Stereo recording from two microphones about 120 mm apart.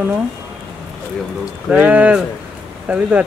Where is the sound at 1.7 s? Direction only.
10° right (ahead or behind).